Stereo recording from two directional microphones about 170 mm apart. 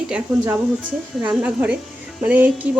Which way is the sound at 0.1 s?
10° right (ahead or behind).